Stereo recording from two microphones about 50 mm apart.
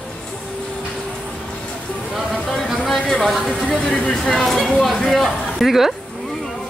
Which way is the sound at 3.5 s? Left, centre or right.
Centre.